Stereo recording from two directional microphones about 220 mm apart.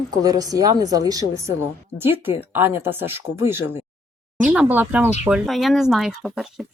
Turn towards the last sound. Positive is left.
turn(degrees=0)  # may be behind; listen again after turning